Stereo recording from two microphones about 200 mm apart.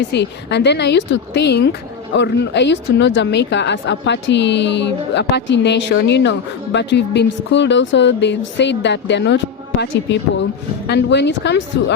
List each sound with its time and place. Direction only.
0.0 s a woman's voice: 60° left (ahead or behind)